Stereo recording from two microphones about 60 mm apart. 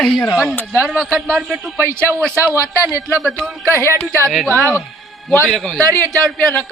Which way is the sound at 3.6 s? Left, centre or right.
Right.